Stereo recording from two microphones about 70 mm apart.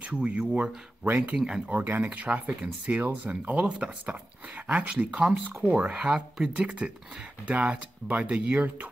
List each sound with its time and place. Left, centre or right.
0.0 s speech: centre
1.0 s speech: right
1.3 s speech: centre
1.7 s speech: right
6.1 s speech: centre; by 8.7 s right